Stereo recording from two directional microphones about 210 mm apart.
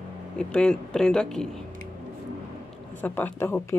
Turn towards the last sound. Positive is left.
turn(degrees=10)  # may be behind; listen again after turning